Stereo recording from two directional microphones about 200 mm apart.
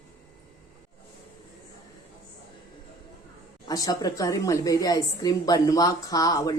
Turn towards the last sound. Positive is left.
turn(degrees=15)  # may be behind; listen again after turning